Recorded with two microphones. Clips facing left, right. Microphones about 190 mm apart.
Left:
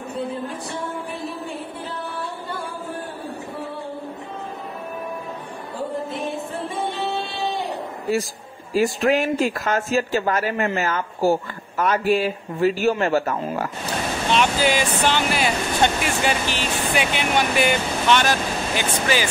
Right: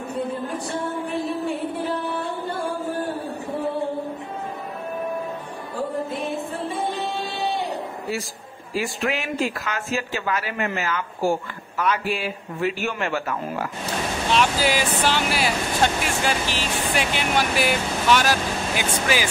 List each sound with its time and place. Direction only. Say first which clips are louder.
8.7 s speech: left 7 dB; 40° left (ahead or behind)
14.3 s speech: left 1 dB; centre (ahead or behind)